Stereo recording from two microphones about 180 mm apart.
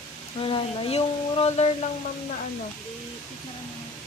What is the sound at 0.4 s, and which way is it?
Speech, 30° left (ahead or behind).